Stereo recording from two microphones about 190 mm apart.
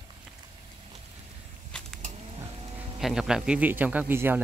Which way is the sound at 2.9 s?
Centre (ahead or behind).